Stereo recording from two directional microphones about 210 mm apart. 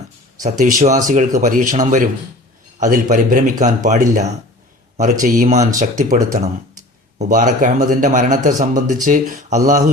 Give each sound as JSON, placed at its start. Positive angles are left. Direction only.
{"t": 0.4, "sound": "a man's voice", "side_deg": -35}